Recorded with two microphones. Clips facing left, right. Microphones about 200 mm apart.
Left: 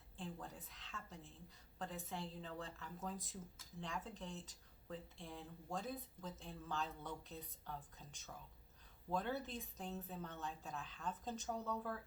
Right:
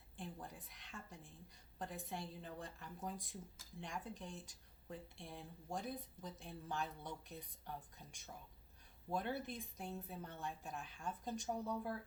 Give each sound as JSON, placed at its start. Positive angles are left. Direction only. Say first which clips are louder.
{"t": 0.2, "sound": "speech", "louder": "left 1 dB", "side_deg": -15}